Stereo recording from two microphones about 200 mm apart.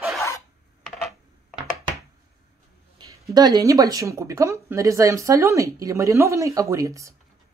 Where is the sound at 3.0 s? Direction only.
20° right (ahead or behind).